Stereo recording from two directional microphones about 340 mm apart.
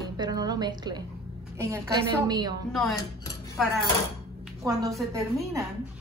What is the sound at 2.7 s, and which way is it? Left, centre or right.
Speech, centre.